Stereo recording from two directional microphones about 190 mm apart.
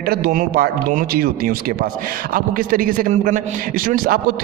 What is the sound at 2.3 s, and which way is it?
A man's voice, 50° right (ahead or behind).